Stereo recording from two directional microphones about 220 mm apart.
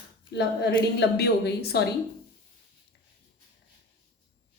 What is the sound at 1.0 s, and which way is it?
Speech, 50° left (ahead or behind).